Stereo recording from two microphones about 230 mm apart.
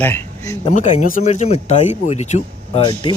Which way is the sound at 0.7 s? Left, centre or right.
Left.